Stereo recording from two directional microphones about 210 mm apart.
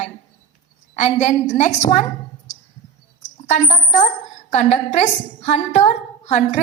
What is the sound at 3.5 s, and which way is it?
A woman's voice, 30° left (ahead or behind).